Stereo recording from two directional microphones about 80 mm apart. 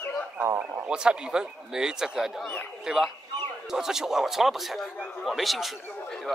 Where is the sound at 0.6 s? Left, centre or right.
Centre.